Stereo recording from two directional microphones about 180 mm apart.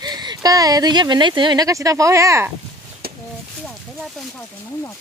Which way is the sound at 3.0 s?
60° right (ahead or behind).